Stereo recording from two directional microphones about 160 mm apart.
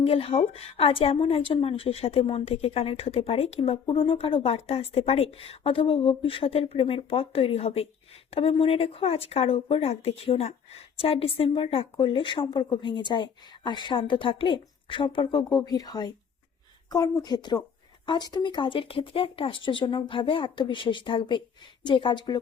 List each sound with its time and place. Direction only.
0.0 s speech: 35° left (ahead or behind)
17.2 s speech: 25° left (ahead or behind)